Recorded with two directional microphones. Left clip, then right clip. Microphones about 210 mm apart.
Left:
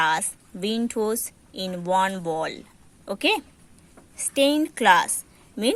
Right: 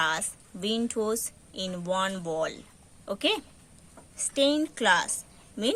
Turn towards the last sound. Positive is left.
turn(degrees=20)  # may be behind; listen again after turning